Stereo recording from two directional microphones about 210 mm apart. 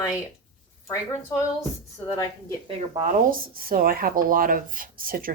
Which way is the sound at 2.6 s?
35° right (ahead or behind).